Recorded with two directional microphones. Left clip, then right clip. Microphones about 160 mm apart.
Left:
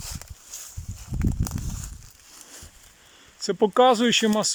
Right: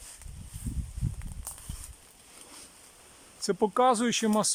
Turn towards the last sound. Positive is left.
turn(degrees=0)  # may be behind; listen again after turning